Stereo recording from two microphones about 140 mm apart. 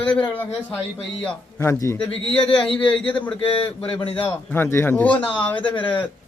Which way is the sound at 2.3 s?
40° left (ahead or behind).